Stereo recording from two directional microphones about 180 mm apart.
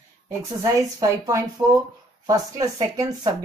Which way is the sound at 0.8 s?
20° right (ahead or behind).